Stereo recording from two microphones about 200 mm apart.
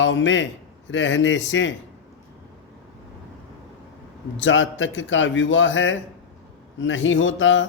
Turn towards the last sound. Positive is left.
turn(degrees=70)  # may be behind; listen again after turning